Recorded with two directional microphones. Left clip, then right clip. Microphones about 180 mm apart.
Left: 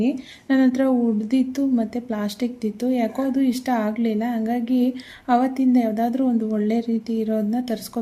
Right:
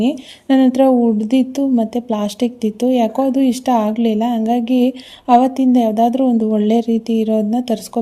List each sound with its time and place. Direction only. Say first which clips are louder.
0.4 s a woman's voice: right 7 dB; 40° right (ahead or behind)